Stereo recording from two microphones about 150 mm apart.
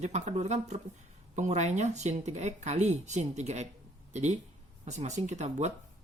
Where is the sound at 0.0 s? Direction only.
50° right (ahead or behind).